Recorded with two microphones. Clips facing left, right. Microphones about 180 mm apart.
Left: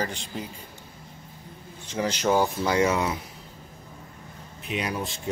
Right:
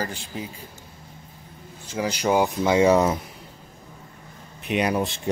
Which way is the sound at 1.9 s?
10° right (ahead or behind).